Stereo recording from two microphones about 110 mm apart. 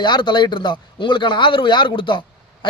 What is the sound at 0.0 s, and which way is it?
A man's voice, 45° left (ahead or behind).